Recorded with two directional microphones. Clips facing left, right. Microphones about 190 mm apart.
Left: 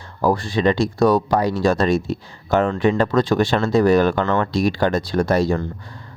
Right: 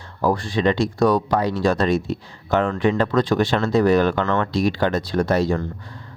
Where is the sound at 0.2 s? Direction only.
35° left (ahead or behind).